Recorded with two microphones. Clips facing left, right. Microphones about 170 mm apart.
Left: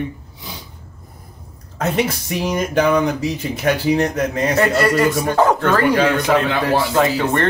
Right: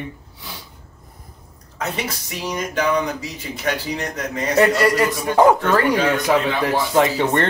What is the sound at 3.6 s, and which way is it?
Speech, 55° left (ahead or behind).